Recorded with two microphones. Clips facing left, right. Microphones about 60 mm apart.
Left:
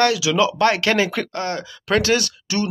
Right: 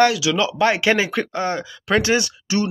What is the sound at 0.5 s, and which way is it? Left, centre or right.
Speech, centre.